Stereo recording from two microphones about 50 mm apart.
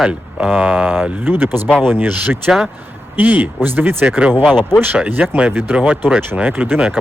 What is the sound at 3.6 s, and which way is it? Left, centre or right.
Speech, right.